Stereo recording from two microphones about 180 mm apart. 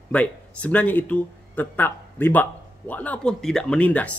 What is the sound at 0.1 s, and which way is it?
Speech, 5° left (ahead or behind).